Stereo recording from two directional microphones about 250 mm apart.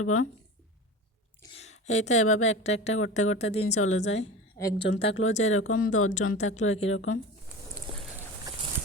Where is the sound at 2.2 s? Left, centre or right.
Left.